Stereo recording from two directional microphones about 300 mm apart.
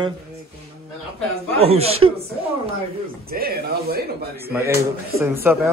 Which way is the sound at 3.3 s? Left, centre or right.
Right.